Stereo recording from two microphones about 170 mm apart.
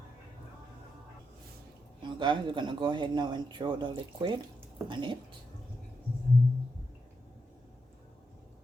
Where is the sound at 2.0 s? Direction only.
30° right (ahead or behind).